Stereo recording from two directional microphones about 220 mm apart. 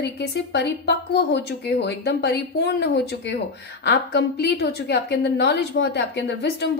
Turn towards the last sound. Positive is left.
turn(degrees=50)  # may be behind; listen again after turning